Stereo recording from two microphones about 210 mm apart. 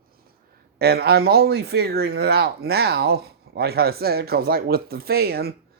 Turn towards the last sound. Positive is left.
turn(degrees=-50)  # may be behind; listen again after turning